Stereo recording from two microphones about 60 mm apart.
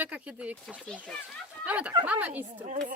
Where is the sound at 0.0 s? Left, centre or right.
Right.